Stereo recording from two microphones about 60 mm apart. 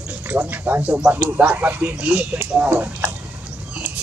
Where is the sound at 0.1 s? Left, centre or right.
Right.